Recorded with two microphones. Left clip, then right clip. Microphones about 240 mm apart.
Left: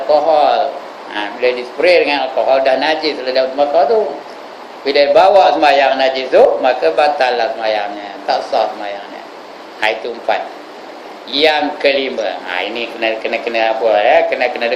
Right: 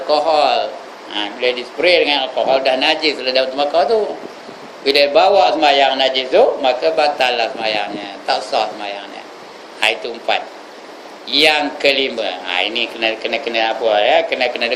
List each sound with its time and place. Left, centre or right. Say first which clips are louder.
0.1 s a sound: left 3 dB; right
1.1 s a man's voice: left 2 dB; right
4.9 s a man's voice: left 3 dB; right
11.3 s speech: left 1 dB; right